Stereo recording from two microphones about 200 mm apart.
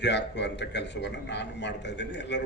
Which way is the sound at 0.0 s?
60° left (ahead or behind).